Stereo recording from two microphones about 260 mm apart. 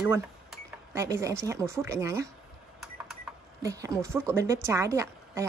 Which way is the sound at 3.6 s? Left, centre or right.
Centre.